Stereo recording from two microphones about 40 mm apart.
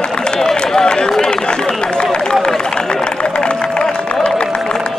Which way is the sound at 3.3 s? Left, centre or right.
Left.